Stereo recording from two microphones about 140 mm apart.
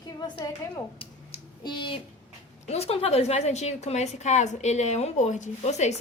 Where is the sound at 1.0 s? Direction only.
40° left (ahead or behind).